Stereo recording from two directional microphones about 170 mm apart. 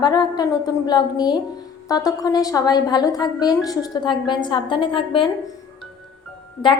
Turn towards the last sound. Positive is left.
turn(degrees=25)  # may be behind; listen again after turning